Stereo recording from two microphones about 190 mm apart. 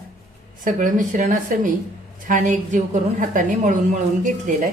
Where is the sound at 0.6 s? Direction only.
45° right (ahead or behind).